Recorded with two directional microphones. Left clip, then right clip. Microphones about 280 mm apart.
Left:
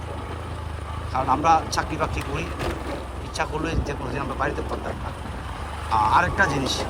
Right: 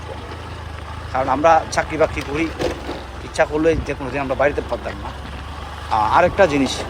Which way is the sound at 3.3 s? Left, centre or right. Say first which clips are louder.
Right 10 dB; right.